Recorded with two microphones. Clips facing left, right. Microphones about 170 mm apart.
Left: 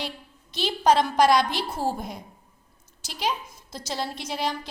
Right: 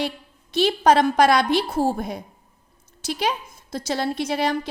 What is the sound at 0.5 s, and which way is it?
A woman's voice, 60° right (ahead or behind).